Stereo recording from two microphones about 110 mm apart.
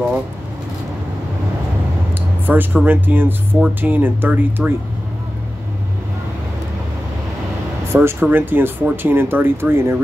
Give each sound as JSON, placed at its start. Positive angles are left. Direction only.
{"t": 2.4, "sound": "speech", "side_deg": -15}
{"t": 7.9, "sound": "speech", "side_deg": -20}